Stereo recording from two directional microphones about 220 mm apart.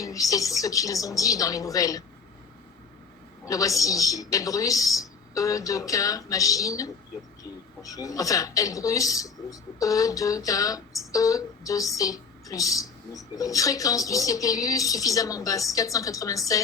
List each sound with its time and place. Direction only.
0.0 s a woman's voice: 15° left (ahead or behind)
3.4 s a woman's voice: 15° left (ahead or behind)